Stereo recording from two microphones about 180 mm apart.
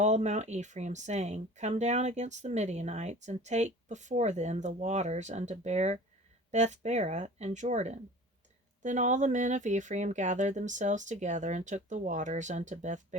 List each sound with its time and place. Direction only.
0.0 s speech: 40° right (ahead or behind)